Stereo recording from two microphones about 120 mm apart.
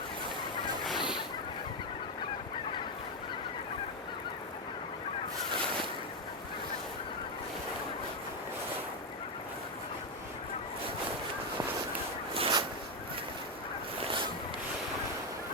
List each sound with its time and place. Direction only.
12.3 s zipper: 45° right (ahead or behind)